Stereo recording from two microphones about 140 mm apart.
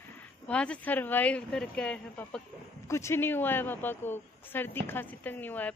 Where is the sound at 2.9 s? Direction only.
20° left (ahead or behind).